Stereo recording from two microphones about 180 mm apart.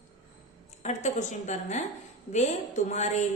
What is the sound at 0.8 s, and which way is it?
A woman's voice, 40° left (ahead or behind).